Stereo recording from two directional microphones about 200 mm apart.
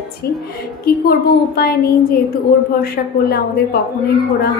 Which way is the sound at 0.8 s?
50° left (ahead or behind).